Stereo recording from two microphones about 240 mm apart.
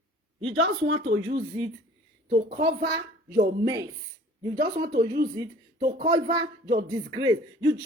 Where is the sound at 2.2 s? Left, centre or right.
Right.